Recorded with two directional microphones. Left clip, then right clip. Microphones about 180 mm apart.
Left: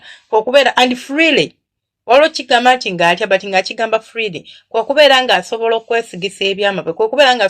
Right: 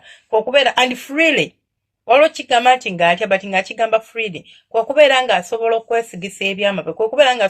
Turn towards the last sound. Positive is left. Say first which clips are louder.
# left 3 dB
turn(degrees=30)  # may be behind; listen again after turning